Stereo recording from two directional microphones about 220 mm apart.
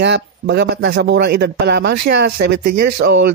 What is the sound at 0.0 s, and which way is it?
Speech, 50° right (ahead or behind).